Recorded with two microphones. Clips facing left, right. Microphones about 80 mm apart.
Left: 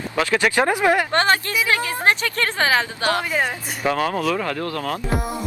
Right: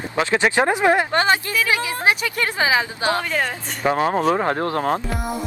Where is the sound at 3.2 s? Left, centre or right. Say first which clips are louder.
Left 1 dB; centre.